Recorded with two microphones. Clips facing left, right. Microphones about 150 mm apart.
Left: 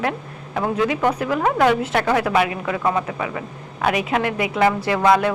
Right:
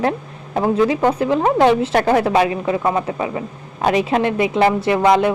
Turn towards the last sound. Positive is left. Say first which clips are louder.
# right 3 dB
turn(degrees=-20)  # may be behind; listen again after turning